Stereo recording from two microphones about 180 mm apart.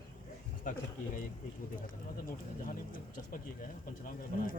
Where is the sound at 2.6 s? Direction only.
50° left (ahead or behind).